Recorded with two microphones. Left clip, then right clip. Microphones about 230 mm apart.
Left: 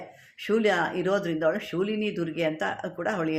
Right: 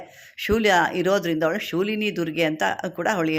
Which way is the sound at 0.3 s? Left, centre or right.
Right.